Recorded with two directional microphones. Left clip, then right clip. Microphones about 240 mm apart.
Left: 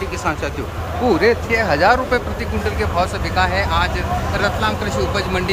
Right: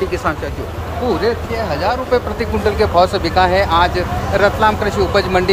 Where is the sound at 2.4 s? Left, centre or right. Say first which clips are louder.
Right 6 dB; right.